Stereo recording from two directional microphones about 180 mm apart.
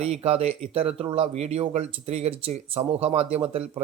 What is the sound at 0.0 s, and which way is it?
Speech, 35° right (ahead or behind).